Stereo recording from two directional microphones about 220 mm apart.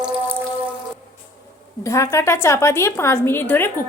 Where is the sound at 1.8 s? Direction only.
15° left (ahead or behind).